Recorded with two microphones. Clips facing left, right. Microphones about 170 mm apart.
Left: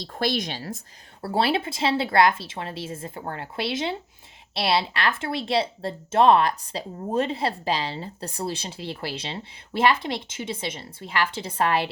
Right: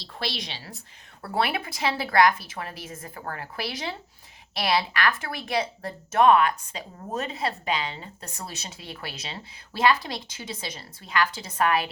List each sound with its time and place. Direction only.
0.0 s a woman's voice: 50° left (ahead or behind)
1.2 s speech: 30° left (ahead or behind)